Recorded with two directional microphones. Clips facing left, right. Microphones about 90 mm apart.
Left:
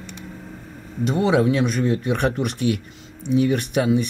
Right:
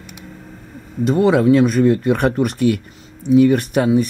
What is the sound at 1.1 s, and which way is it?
Speech, 40° right (ahead or behind).